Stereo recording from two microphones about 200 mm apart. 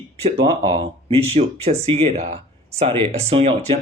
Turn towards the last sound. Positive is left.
turn(degrees=-30)  # may be behind; listen again after turning